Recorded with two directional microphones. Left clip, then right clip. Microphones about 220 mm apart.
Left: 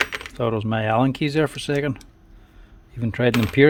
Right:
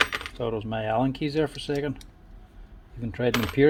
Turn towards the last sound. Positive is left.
turn(degrees=45)  # may be behind; listen again after turning